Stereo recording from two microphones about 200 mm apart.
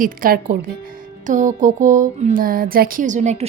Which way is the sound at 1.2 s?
40° right (ahead or behind).